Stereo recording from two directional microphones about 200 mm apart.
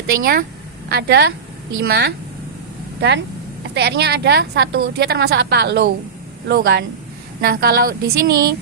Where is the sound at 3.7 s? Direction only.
55° right (ahead or behind).